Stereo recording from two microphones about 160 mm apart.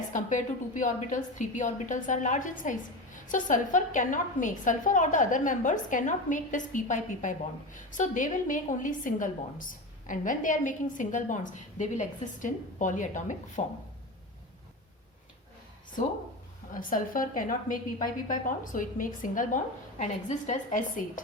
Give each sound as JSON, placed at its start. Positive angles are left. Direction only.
{"t": 0.1, "sound": "a woman's voice", "side_deg": 55}
{"t": 16.7, "sound": "a woman's voice", "side_deg": 60}